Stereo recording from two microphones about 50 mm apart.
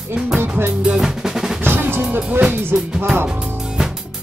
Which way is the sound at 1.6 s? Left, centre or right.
Right.